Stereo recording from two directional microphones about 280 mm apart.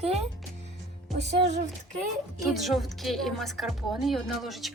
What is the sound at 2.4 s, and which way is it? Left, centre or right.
Speech, centre.